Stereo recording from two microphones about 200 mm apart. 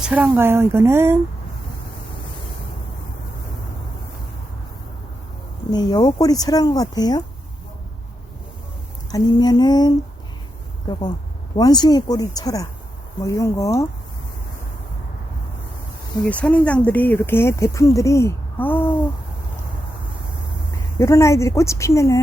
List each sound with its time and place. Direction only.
0.0 s speech: 5° right (ahead or behind)
5.7 s speech: 20° left (ahead or behind)
9.1 s speech: 20° left (ahead or behind)
16.2 s speech: 5° left (ahead or behind)
21.0 s speech: 15° left (ahead or behind)